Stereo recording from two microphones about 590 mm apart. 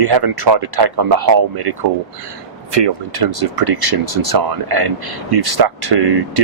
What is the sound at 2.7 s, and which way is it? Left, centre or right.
Speech, right.